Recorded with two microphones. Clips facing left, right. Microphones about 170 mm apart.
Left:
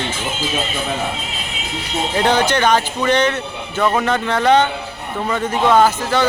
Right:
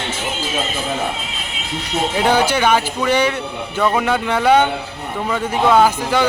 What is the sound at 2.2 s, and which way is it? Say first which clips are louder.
Speech: even; 10° right (ahead or behind).